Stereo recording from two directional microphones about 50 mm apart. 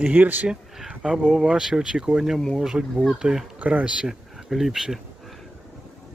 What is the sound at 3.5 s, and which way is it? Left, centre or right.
Speech, right.